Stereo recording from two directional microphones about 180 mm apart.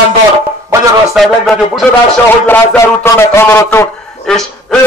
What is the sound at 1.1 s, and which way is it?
A man's voice, centre (ahead or behind).